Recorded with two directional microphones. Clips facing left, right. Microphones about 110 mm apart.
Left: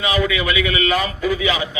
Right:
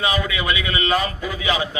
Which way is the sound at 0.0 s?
25° right (ahead or behind).